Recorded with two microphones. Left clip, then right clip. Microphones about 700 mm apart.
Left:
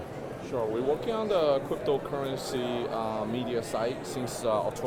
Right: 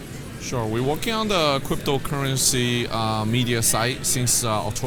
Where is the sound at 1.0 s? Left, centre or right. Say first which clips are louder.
Right 6 dB; right.